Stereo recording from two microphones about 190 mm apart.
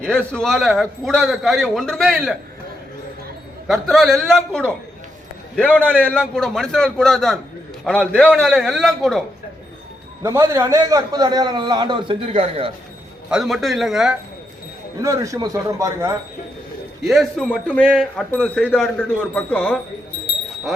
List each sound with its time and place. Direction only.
0.3 s speech: 5° left (ahead or behind)
3.7 s a man's voice: centre (ahead or behind)
10.2 s a man's voice: 15° right (ahead or behind); by 12.7 s 30° right (ahead or behind)
13.3 s speech: centre (ahead or behind)
15.0 s a man's voice: 15° right (ahead or behind)
17.0 s speech: centre (ahead or behind)